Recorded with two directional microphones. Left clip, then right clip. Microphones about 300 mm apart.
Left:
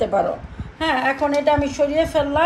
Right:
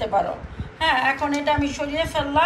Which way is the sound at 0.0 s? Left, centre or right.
Left.